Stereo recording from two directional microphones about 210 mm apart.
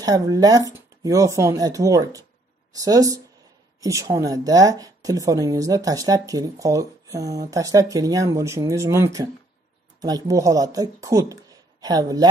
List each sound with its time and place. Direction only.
0.0 s speech: 15° right (ahead or behind)